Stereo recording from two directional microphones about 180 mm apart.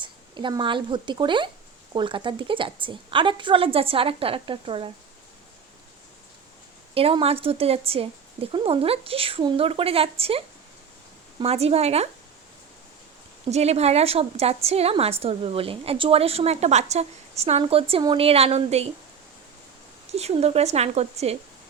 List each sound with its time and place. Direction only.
0.0 s a woman's voice: 25° right (ahead or behind)
6.9 s a woman's voice: 30° right (ahead or behind)
13.5 s a woman's voice: 35° right (ahead or behind)
20.1 s a woman's voice: 35° right (ahead or behind)